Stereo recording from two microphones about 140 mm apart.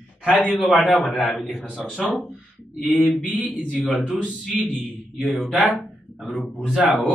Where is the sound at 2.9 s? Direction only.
10° right (ahead or behind).